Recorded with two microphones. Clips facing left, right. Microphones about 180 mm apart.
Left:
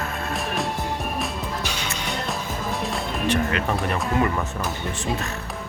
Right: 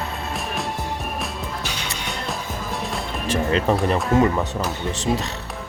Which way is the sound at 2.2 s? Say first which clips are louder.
Left 1 dB; centre (ahead or behind).